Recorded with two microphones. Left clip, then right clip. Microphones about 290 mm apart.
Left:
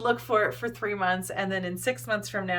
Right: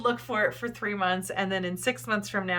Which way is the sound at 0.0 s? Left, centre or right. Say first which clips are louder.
Left 2 dB; centre.